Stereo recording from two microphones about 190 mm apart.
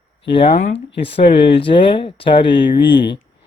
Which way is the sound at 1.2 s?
55° left (ahead or behind).